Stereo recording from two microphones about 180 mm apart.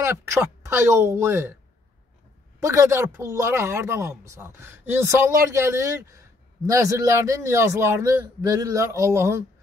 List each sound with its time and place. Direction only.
0.0 s speech: 15° right (ahead or behind)
2.6 s speech: 15° right (ahead or behind)